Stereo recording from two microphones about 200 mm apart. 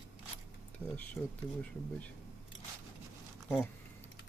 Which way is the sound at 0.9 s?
5° left (ahead or behind).